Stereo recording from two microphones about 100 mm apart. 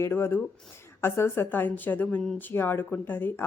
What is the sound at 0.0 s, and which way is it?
Speech, 25° left (ahead or behind).